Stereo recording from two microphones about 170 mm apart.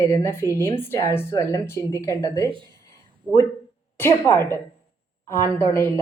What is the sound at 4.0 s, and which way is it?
Speech, 15° left (ahead or behind).